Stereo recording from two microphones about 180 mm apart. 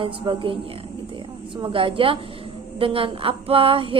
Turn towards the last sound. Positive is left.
turn(degrees=-30)  # may be behind; listen again after turning